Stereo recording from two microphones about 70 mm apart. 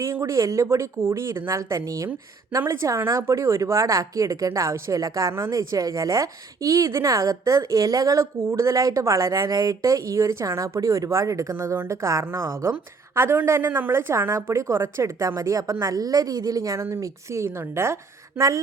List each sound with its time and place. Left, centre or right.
0.0 s a woman's voice: right
13.1 s a woman's voice: right
15.4 s a woman's voice: right
16.8 s a woman's voice: right